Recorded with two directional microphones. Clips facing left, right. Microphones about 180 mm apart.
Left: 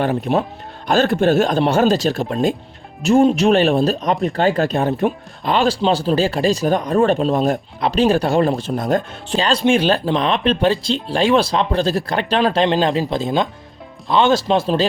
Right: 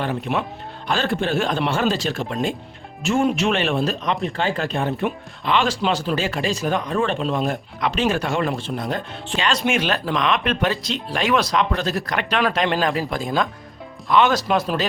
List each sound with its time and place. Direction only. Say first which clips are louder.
0.0 s speech: left 6 dB; 40° left (ahead or behind)